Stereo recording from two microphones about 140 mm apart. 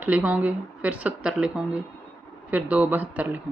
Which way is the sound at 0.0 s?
10° right (ahead or behind).